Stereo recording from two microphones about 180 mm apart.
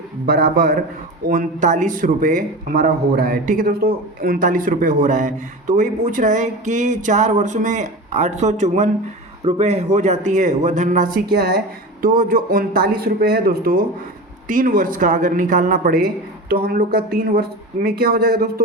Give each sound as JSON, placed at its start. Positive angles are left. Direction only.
{"t": 0.3, "sound": "speech", "side_deg": -60}
{"t": 1.3, "sound": "speech", "side_deg": -45}
{"t": 17.8, "sound": "speech", "side_deg": -60}